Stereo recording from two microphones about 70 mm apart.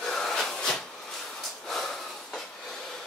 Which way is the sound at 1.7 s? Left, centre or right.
Centre.